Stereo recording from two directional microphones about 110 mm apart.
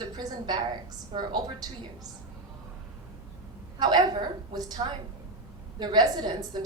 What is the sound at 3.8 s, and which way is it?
A woman's voice, 40° right (ahead or behind).